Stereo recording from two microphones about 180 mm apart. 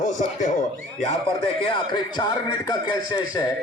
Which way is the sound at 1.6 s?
25° left (ahead or behind).